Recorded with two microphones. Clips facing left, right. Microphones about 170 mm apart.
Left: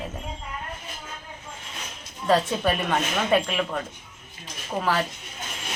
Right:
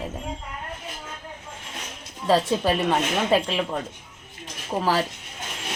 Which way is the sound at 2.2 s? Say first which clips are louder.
Right 1 dB; 25° right (ahead or behind).